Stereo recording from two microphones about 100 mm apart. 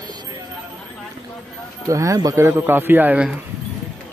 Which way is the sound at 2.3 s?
25° right (ahead or behind).